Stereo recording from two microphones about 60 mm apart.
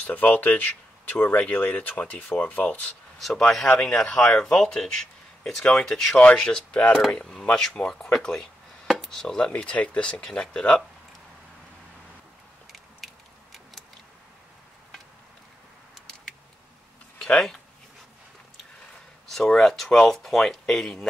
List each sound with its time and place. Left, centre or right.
0.0 s speech: left
3.2 s speech: centre; by 7.0 s left
7.1 s speech: centre
9.5 s speech: left
12.7 s a sound: centre
19.2 s speech: centre